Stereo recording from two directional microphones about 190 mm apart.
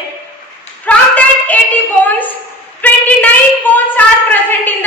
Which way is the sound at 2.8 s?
10° left (ahead or behind).